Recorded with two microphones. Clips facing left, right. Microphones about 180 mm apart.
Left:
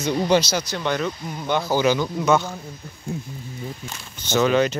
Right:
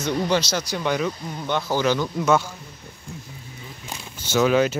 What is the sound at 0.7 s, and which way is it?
Speech, 5° right (ahead or behind).